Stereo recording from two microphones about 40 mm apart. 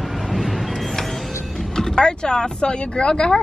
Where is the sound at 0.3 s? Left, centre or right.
Centre.